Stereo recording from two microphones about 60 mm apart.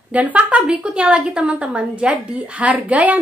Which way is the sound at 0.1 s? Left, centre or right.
Right.